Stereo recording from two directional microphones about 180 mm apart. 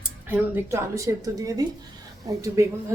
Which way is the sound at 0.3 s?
10° right (ahead or behind).